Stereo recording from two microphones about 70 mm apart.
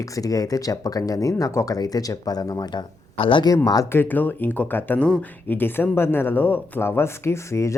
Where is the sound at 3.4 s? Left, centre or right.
Left.